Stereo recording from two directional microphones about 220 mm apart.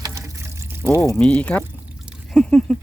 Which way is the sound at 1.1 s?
5° left (ahead or behind).